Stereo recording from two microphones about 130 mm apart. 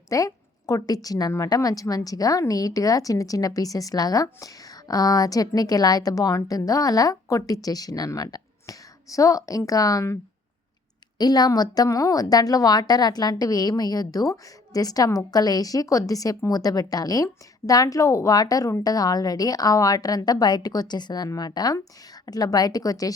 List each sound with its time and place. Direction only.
0.1 s a woman's voice: 25° left (ahead or behind)
11.2 s a woman's voice: 30° left (ahead or behind)